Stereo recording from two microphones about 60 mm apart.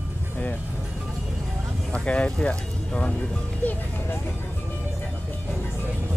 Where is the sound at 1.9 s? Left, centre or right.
Centre.